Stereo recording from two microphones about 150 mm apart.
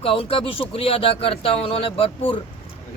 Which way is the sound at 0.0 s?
40° left (ahead or behind).